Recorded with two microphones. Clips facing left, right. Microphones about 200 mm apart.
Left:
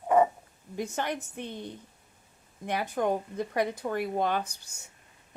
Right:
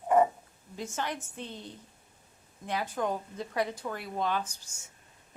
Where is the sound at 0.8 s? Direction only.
60° left (ahead or behind).